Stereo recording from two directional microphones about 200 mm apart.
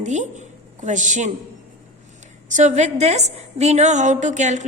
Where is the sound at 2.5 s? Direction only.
35° right (ahead or behind).